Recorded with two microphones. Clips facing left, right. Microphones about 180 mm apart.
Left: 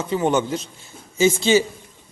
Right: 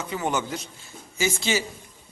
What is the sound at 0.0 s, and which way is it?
A man's voice, 25° left (ahead or behind).